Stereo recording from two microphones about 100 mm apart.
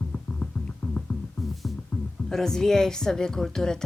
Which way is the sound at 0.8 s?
15° left (ahead or behind).